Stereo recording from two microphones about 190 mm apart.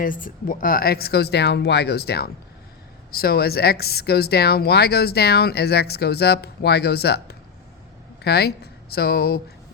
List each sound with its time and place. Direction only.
0.0 s a woman's voice: 45° left (ahead or behind)